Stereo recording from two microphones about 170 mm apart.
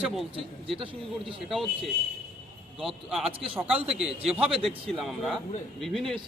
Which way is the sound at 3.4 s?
30° right (ahead or behind).